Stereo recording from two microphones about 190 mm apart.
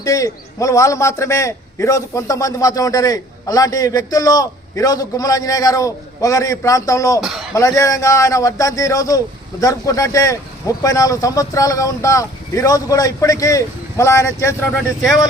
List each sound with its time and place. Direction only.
0.0 s a man's voice: 15° left (ahead or behind)
7.2 s speech: centre (ahead or behind)
7.5 s a man's voice: 15° left (ahead or behind)